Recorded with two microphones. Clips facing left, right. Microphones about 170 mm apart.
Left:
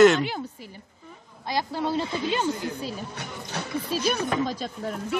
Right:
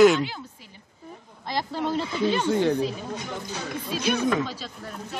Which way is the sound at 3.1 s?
70° left (ahead or behind).